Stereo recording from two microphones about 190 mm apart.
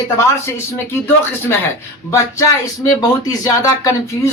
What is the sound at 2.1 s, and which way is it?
Speech, 15° left (ahead or behind).